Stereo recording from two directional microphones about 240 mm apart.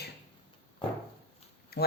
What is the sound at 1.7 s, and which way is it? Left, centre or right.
Speech, left.